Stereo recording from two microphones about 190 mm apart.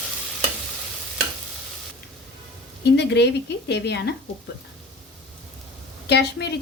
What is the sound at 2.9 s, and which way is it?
A woman's voice, 65° left (ahead or behind).